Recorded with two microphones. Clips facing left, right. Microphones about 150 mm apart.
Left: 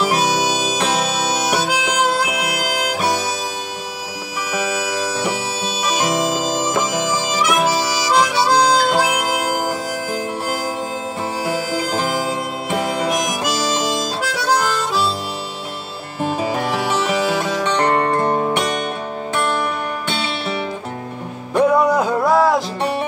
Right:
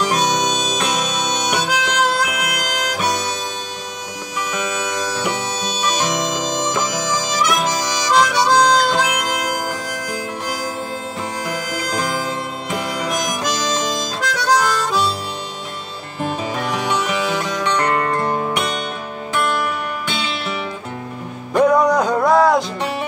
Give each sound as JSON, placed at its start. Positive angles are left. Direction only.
{"t": 0.0, "sound": "harmonica", "side_deg": 5}
{"t": 4.5, "sound": "music", "side_deg": 5}
{"t": 5.8, "sound": "harmonica", "side_deg": 10}
{"t": 11.8, "sound": "music", "side_deg": 5}
{"t": 13.3, "sound": "harmonica", "side_deg": 5}
{"t": 16.4, "sound": "music", "side_deg": 35}
{"t": 21.5, "sound": "music", "side_deg": 5}